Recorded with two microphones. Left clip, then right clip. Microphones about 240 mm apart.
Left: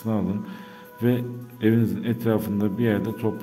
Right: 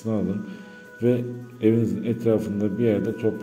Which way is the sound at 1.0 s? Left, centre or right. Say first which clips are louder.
Right 2 dB; left.